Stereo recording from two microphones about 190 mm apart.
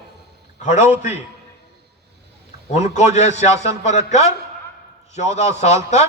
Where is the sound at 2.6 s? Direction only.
40° left (ahead or behind).